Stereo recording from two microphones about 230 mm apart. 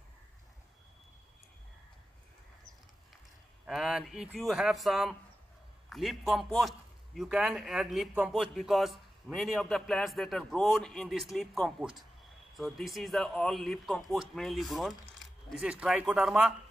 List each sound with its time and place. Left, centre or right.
3.6 s speech: centre